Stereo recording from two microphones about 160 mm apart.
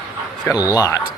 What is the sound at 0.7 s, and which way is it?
Speech, 20° left (ahead or behind).